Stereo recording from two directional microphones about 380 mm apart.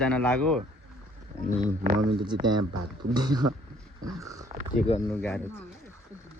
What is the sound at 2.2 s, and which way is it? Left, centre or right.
Speech, centre.